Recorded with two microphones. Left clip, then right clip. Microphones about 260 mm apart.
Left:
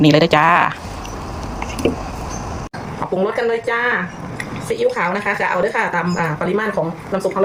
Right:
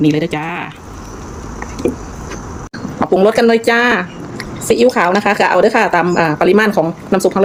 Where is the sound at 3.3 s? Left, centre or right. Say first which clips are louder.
Right 7 dB; right.